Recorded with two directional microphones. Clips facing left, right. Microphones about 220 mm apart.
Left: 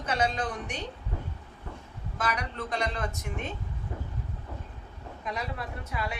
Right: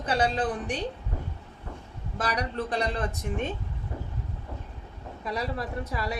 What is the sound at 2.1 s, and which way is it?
A woman's voice, 35° right (ahead or behind).